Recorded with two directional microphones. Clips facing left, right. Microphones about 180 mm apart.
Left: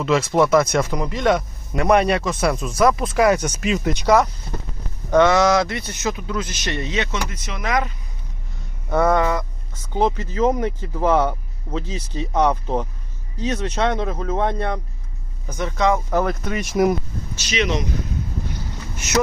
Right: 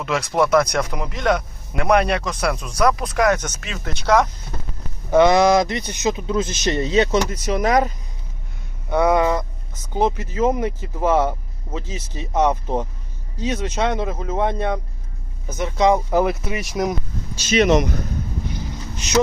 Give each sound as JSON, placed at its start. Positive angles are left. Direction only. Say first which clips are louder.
{"t": 0.0, "sound": "speech", "louder": "left 3 dB", "side_deg": 0}
{"t": 5.1, "sound": "a man's voice", "louder": "right 1 dB", "side_deg": -15}
{"t": 8.9, "sound": "speech", "louder": "even", "side_deg": 0}
{"t": 9.1, "sound": "speech", "louder": "right 1 dB", "side_deg": -20}
{"t": 17.4, "sound": "speech", "louder": "right 7 dB", "side_deg": -50}
{"t": 18.6, "sound": "vehicle", "louder": "right 2 dB", "side_deg": -15}